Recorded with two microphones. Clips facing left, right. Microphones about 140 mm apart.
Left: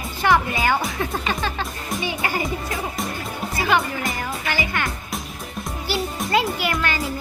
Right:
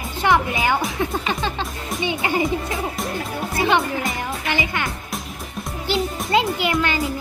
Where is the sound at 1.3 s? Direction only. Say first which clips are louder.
Right 1 dB; 20° right (ahead or behind).